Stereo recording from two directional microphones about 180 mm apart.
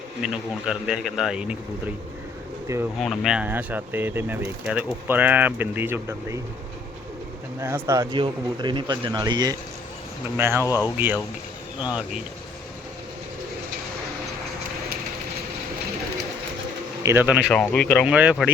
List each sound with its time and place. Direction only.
0.2 s speech: 5° right (ahead or behind)
3.0 s speech: centre (ahead or behind)
7.6 s speech: 15° right (ahead or behind)
10.6 s speech: 20° left (ahead or behind)
10.9 s speech: 10° right (ahead or behind)
17.0 s speech: 15° right (ahead or behind)
17.5 s speech: 5° left (ahead or behind)
18.0 s speech: 5° right (ahead or behind)